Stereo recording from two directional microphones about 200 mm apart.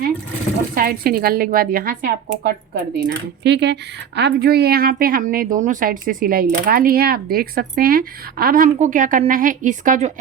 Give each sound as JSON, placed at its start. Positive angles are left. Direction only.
{"t": 0.8, "sound": "a woman's voice", "side_deg": -50}